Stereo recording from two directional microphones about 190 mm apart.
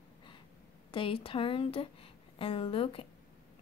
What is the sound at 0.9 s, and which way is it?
Speech, 30° left (ahead or behind).